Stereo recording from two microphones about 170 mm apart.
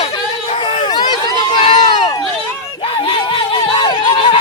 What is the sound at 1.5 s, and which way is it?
Run, 40° left (ahead or behind).